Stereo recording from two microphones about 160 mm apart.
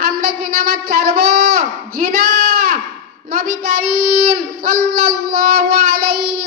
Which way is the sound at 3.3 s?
70° right (ahead or behind).